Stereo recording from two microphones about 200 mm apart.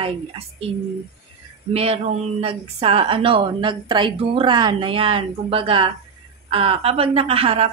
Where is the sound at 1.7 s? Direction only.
30° right (ahead or behind).